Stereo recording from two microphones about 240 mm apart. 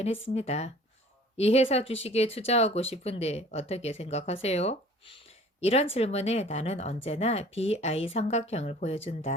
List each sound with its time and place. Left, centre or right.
0.3 s speech: left